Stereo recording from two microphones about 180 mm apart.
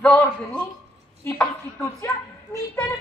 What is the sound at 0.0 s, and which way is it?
Speech, 5° left (ahead or behind).